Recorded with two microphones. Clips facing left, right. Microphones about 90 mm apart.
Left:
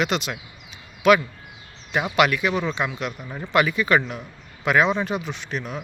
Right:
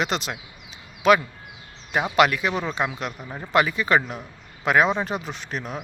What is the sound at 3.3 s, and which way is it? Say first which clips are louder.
Speech: left 1 dB; 15° right (ahead or behind).